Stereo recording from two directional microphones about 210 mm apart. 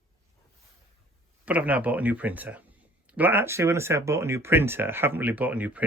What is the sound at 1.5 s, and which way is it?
Speech, 5° right (ahead or behind).